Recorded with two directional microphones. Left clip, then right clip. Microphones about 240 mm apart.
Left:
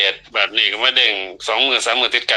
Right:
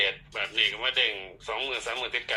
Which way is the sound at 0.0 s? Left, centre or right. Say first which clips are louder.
Left 11 dB; left.